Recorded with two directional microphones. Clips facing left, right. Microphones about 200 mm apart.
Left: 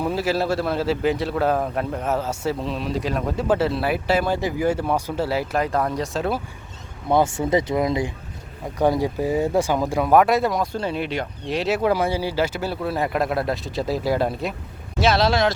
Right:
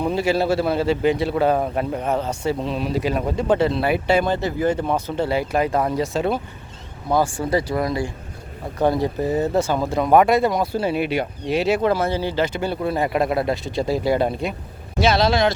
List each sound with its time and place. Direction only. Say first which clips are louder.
0.0 s speech: right 2 dB; 5° left (ahead or behind)
7.1 s speech: left 1 dB; 20° left (ahead or behind)
10.1 s speech: right 2 dB; centre (ahead or behind)